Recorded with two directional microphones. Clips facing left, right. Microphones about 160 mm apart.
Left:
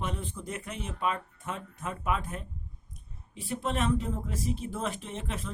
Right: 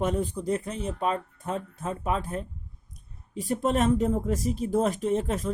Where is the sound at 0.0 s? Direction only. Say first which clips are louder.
Right 9 dB; 40° right (ahead or behind).